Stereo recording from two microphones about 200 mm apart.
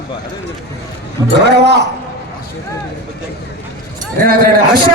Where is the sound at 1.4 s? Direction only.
55° right (ahead or behind).